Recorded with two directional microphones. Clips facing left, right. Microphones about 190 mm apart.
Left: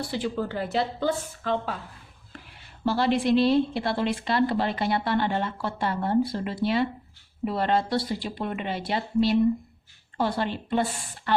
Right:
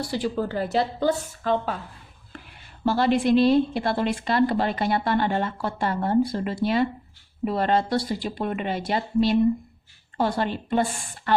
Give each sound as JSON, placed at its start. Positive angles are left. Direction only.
{"t": 0.0, "sound": "a woman's voice", "side_deg": -40}
{"t": 2.8, "sound": "a woman's voice", "side_deg": -50}